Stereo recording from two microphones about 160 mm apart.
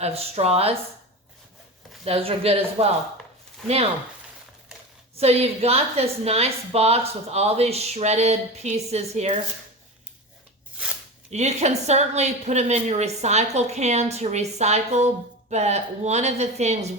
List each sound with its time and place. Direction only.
0.0 s a woman's voice: 40° right (ahead or behind)
2.0 s a woman's voice: 35° right (ahead or behind)
5.1 s a woman's voice: 40° right (ahead or behind)
11.3 s a woman's voice: 45° right (ahead or behind)